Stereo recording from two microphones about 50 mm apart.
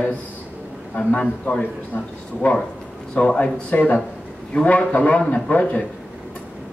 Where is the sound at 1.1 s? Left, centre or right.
Left.